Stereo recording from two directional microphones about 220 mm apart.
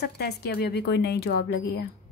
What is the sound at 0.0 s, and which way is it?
Speech, 50° left (ahead or behind).